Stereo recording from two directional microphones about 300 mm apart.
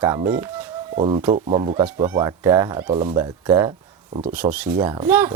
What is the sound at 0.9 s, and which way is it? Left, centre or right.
Speech, centre.